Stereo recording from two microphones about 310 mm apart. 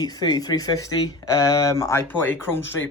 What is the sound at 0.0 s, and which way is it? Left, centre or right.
Speech, centre.